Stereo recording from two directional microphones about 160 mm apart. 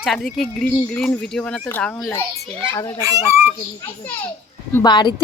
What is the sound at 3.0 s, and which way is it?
Speech, 20° right (ahead or behind).